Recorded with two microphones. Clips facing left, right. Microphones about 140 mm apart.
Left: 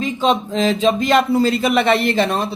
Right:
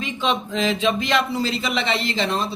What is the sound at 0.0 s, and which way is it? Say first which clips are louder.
Speech: left 6 dB; 40° left (ahead or behind).